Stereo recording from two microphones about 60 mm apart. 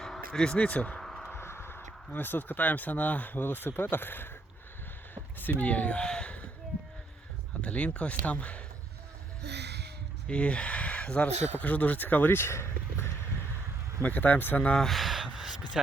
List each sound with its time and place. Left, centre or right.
0.0 s speech: centre; by 0.9 s left
0.9 s a sound: centre
1.3 s a sound: left
2.1 s speech: left
5.4 s a sound: left
7.6 s speech: left
10.2 s speech: centre; by 13.1 s left
14.0 s speech: left
14.8 s gasp: centre